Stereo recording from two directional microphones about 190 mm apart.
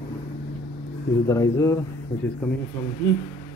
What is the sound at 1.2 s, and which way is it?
Speech, 15° left (ahead or behind).